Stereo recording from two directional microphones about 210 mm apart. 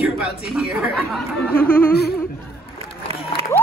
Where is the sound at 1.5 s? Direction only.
10° left (ahead or behind).